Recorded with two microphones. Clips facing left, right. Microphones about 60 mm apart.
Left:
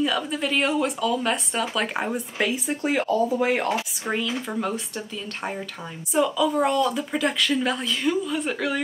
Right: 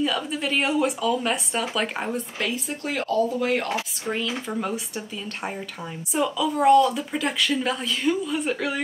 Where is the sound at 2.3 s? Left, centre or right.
Centre.